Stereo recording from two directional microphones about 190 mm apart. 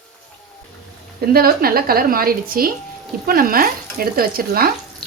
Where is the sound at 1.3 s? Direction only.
50° right (ahead or behind).